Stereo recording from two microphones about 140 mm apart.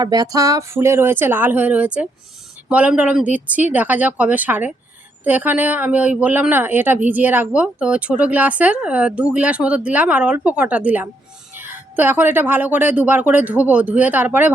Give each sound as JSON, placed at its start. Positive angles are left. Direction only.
{"t": 0.0, "sound": "speech", "side_deg": -25}